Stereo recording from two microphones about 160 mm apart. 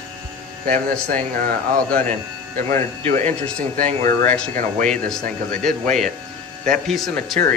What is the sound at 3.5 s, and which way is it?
Speech, 5° left (ahead or behind).